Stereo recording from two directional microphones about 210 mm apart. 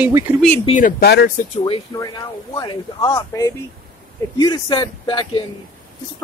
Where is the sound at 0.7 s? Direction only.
40° left (ahead or behind).